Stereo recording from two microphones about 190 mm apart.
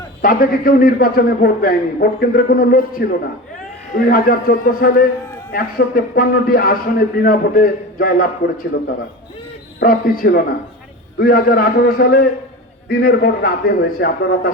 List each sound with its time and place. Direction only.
0.2 s a man's voice: 50° left (ahead or behind)
9.8 s a man's voice: 50° left (ahead or behind)